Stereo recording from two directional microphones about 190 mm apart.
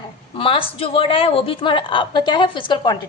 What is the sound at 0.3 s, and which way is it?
A woman's voice, 30° left (ahead or behind).